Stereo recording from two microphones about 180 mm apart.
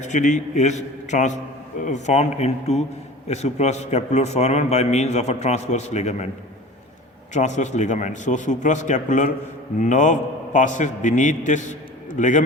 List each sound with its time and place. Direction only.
0.0 s a man's voice: 40° left (ahead or behind)
7.3 s a man's voice: 40° left (ahead or behind)